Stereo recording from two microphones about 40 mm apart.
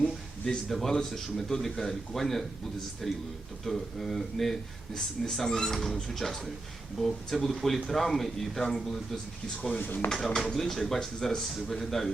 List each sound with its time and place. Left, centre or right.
0.7 s speech: centre
9.6 s speech: left
9.8 s speech: left
10.2 s speech: centre